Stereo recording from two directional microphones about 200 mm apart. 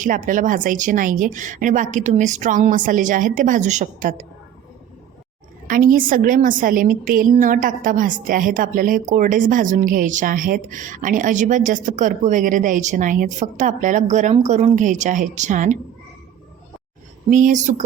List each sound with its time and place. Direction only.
0.0 s a woman's voice: 40° right (ahead or behind)
5.6 s a woman's voice: 45° right (ahead or behind)
17.2 s a woman's voice: 40° right (ahead or behind)